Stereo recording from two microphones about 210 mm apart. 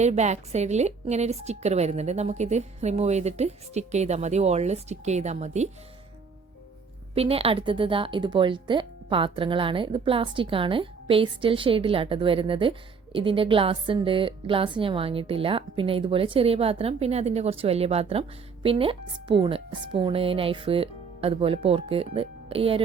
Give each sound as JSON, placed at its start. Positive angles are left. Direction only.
{"t": 0.0, "sound": "a woman's voice", "side_deg": -35}
{"t": 7.2, "sound": "a woman's voice", "side_deg": -30}